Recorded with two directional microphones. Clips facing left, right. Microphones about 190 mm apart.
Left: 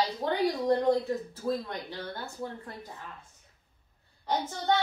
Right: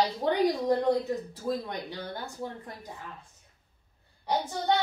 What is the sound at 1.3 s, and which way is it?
A woman's voice, 15° right (ahead or behind).